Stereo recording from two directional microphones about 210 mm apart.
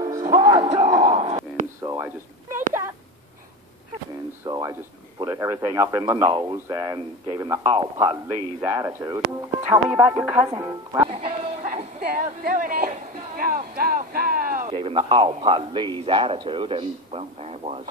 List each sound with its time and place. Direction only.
0.3 s music: 20° right (ahead or behind)
1.1 s busy signal: 30° right (ahead or behind)
1.8 s a sound: 10° right (ahead or behind)
4.5 s speech: 20° right (ahead or behind)
11.1 s a sound: 30° right (ahead or behind)
12.0 s speech: 45° right (ahead or behind)
14.7 s a man's voice: 25° right (ahead or behind)